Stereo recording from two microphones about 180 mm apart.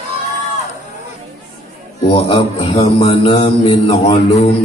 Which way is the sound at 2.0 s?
30° left (ahead or behind).